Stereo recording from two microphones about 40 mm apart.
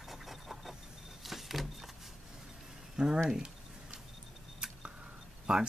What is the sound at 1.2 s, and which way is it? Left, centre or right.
Power windows, centre.